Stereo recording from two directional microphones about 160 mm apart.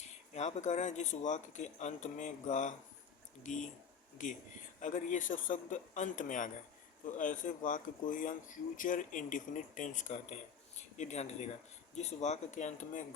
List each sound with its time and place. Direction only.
0.3 s speech: 45° left (ahead or behind)